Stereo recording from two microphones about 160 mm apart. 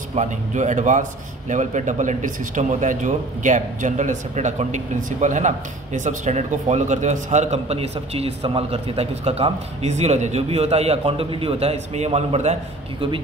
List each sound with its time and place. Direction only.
0.1 s a man's voice: 45° right (ahead or behind)